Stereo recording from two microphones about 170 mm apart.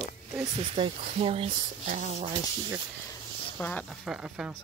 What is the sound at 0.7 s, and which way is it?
Speech, 30° right (ahead or behind).